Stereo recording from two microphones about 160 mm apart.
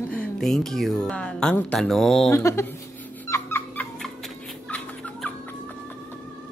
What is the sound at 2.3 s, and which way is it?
Speech, 15° left (ahead or behind).